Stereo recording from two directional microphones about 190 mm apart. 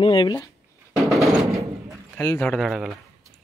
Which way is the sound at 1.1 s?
Centre (ahead or behind).